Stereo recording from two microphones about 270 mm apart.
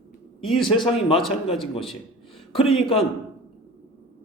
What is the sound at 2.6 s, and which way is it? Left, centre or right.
Speech, left.